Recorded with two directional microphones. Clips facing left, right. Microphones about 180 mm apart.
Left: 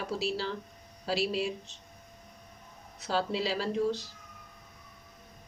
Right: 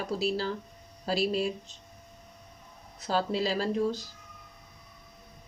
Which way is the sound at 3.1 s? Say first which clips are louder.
Right 2 dB; 45° right (ahead or behind).